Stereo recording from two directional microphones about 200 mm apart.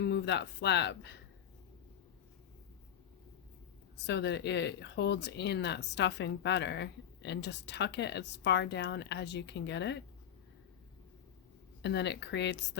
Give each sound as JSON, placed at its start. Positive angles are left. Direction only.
{"t": 0.0, "sound": "speech", "side_deg": 60}
{"t": 4.0, "sound": "speech", "side_deg": 60}
{"t": 11.8, "sound": "speech", "side_deg": 60}